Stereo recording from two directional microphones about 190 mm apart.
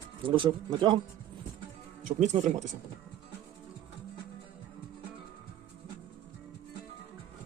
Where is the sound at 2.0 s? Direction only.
40° right (ahead or behind).